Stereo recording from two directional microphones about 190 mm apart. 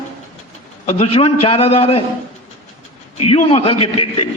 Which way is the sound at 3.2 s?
30° left (ahead or behind).